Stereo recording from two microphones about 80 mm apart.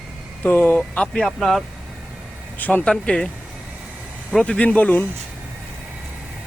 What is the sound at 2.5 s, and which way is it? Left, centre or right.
Speech, left.